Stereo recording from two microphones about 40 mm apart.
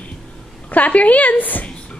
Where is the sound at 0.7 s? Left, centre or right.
Left.